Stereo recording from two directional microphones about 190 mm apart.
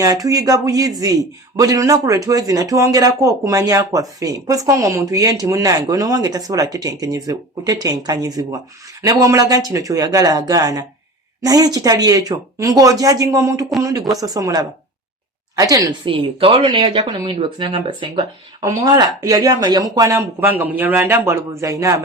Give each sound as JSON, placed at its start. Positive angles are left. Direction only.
{"t": 0.0, "sound": "speech", "side_deg": -20}